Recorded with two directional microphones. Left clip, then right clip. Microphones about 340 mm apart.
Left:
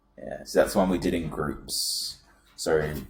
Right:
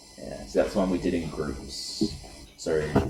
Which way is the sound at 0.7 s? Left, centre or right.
Centre.